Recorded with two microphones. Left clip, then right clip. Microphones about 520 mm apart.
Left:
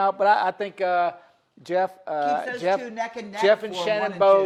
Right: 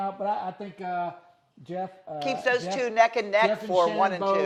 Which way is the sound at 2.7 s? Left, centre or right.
Right.